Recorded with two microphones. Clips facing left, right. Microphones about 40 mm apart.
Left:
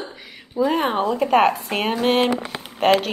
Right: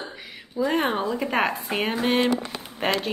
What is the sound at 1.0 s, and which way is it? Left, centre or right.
Speech, left.